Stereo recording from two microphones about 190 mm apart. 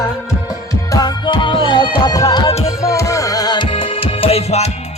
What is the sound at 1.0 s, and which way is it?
Music, 25° left (ahead or behind).